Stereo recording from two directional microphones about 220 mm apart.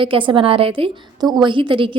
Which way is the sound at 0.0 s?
25° right (ahead or behind).